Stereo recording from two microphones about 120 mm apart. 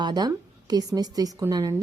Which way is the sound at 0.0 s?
35° right (ahead or behind).